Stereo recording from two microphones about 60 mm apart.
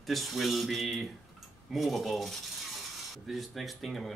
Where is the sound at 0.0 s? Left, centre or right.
Centre.